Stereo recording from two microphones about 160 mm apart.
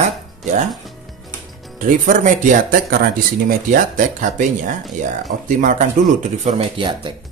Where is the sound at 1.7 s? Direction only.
55° right (ahead or behind).